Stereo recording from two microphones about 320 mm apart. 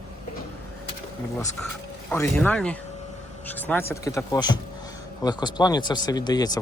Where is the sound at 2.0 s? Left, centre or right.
Centre.